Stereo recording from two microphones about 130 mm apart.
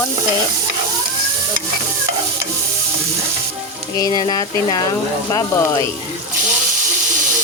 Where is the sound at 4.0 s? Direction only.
30° left (ahead or behind).